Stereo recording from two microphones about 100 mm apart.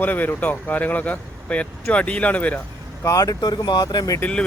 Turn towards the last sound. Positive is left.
turn(degrees=40)  # may be behind; listen again after turning